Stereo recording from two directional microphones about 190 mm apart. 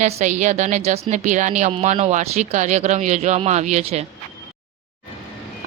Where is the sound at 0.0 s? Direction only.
40° right (ahead or behind).